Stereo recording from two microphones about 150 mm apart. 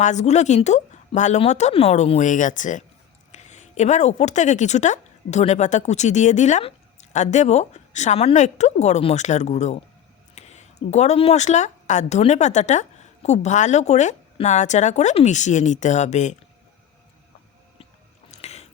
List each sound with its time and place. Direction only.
0.0 s a woman's voice: 50° left (ahead or behind)
18.3 s music: 45° left (ahead or behind)